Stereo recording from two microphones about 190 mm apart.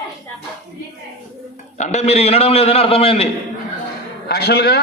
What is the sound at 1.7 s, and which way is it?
A man's voice, 35° left (ahead or behind).